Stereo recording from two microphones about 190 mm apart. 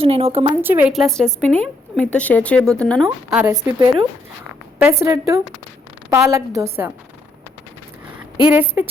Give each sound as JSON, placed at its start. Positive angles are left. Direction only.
{"t": 0.0, "sound": "a woman's voice", "side_deg": -30}
{"t": 0.6, "sound": "a woman's voice", "side_deg": -10}
{"t": 3.3, "sound": "a woman's voice", "side_deg": -10}
{"t": 8.2, "sound": "speech", "side_deg": -10}